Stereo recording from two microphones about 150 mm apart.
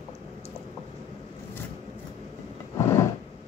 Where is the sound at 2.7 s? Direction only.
20° left (ahead or behind).